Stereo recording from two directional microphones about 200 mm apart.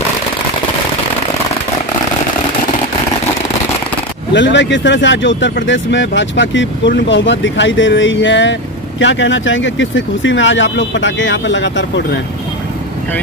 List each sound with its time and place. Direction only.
4.3 s speech: 60° left (ahead or behind)